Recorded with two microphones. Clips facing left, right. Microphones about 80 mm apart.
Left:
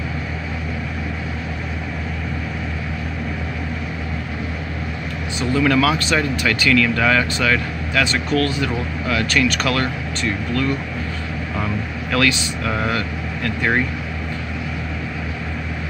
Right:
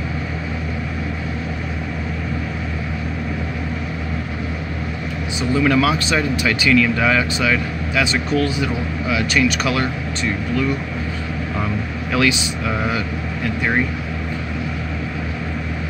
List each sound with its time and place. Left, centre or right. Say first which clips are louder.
5.4 s speech: even; centre
12.1 s speech: right 1 dB; centre